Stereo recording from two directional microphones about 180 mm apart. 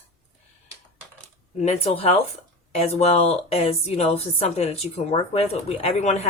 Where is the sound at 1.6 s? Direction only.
35° left (ahead or behind).